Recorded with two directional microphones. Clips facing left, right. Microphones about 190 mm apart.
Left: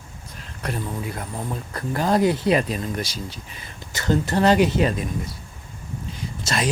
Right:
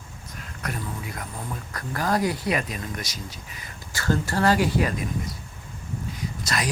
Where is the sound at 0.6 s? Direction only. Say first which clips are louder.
Left 5 dB; 30° left (ahead or behind).